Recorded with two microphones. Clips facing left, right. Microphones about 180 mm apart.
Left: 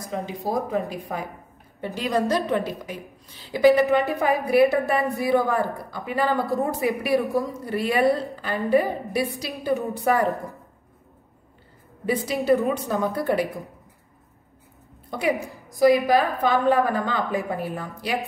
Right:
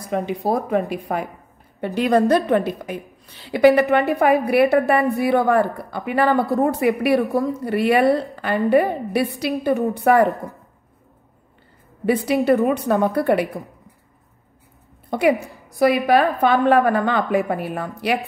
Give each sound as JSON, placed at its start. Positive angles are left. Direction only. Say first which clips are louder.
{"t": 0.0, "sound": "speech", "louder": "right 6 dB", "side_deg": -65}
{"t": 12.4, "sound": "speech", "louder": "right 2 dB", "side_deg": -60}
{"t": 15.0, "sound": "a woman's voice", "louder": "right 6 dB", "side_deg": -65}